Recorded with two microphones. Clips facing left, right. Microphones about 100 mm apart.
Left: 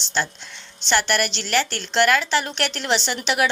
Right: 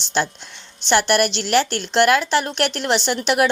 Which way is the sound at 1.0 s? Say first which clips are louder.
Right 5 dB; 50° right (ahead or behind).